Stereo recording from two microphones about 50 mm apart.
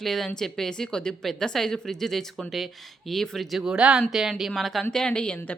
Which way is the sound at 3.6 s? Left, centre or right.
Centre.